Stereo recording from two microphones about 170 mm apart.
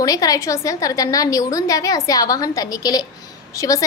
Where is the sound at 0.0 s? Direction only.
20° left (ahead or behind).